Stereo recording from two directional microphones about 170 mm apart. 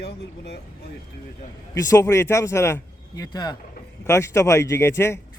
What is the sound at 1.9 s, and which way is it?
A man's voice, 20° left (ahead or behind).